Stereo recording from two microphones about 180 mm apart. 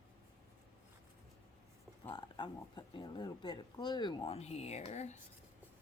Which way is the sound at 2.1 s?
25° left (ahead or behind).